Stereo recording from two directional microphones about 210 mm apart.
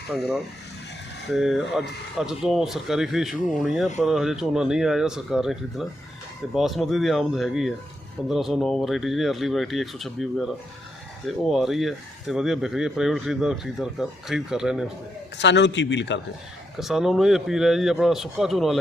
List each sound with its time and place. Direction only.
0.1 s speech: centre (ahead or behind)
15.4 s a man's voice: 55° left (ahead or behind)
16.7 s speech: centre (ahead or behind)